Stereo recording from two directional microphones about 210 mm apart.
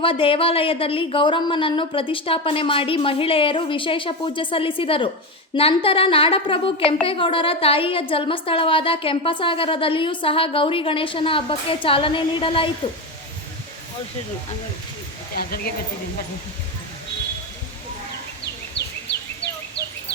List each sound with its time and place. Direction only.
0.0 s a woman's voice: 25° left (ahead or behind)
15.4 s speech: 45° left (ahead or behind)